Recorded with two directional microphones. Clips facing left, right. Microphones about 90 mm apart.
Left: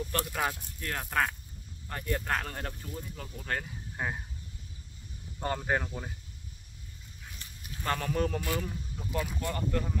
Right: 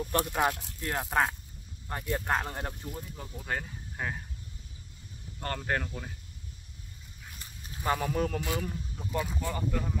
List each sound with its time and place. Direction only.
0.1 s speech: 15° right (ahead or behind)
0.5 s speech: 90° right
0.7 s speech: 20° right (ahead or behind)
3.9 s sheep: 10° left (ahead or behind)
5.4 s speech: 10° left (ahead or behind)
7.8 s speech: 10° right (ahead or behind)